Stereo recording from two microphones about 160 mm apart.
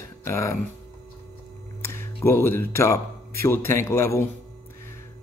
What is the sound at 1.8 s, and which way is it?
Speech, 15° left (ahead or behind).